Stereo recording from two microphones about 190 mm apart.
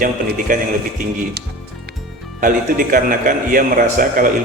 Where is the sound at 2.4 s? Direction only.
45° right (ahead or behind).